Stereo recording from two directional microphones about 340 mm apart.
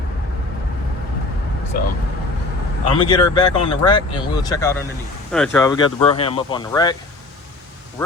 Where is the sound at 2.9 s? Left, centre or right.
Centre.